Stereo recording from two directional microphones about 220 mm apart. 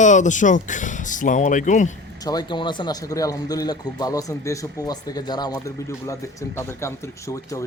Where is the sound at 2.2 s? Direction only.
15° left (ahead or behind).